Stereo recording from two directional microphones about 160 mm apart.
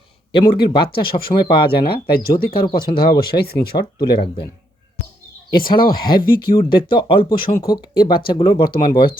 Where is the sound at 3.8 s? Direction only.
30° left (ahead or behind).